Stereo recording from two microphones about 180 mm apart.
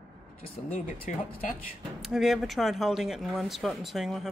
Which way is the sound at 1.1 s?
45° left (ahead or behind).